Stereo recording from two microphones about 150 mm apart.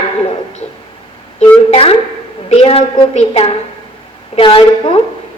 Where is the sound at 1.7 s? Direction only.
40° left (ahead or behind).